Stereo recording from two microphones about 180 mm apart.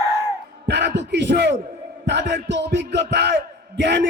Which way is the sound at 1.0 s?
75° right (ahead or behind).